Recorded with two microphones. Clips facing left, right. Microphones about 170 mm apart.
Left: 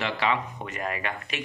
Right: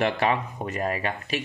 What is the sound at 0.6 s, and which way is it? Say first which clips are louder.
Speech: right 4 dB; 35° right (ahead or behind).